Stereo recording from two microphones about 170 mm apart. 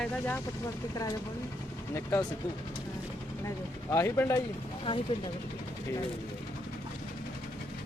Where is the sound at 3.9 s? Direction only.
15° left (ahead or behind).